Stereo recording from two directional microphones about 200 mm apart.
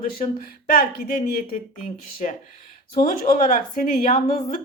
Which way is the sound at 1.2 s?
45° left (ahead or behind).